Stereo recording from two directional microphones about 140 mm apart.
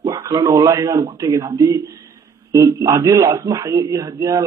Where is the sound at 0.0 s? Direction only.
25° right (ahead or behind).